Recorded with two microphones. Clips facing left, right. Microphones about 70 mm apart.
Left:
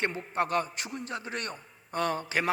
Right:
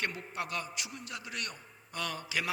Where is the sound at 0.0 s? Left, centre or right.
Left.